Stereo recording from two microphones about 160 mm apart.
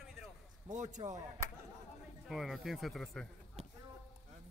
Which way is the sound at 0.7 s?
50° right (ahead or behind).